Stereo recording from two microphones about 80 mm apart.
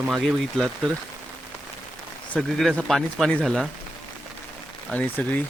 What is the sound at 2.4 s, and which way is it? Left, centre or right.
A man's voice, centre.